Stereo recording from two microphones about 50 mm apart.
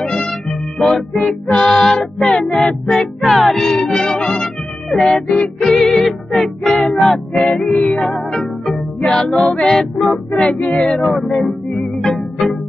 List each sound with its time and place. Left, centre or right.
0.2 s music: centre
1.6 s music: centre
2.0 s child singing: centre
2.4 s music: left
3.3 s music: centre; by 5.5 s left
5.6 s music: centre
6.7 s music: left
7.0 s music: centre
8.3 s music: centre
9.3 s music: centre
10.0 s music: centre
10.6 s cat: left
11.1 s music: centre